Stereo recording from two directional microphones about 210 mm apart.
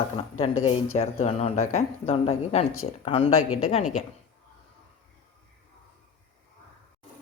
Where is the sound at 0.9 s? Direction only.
30° left (ahead or behind).